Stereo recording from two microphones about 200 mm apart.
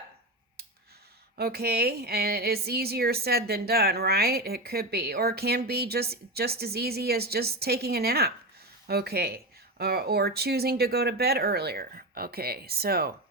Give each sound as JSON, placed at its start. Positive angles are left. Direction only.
{"t": 1.4, "sound": "speech", "side_deg": -50}